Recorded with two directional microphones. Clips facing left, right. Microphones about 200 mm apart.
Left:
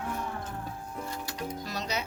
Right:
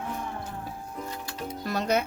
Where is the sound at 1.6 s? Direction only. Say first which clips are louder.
Right 12 dB; 55° right (ahead or behind).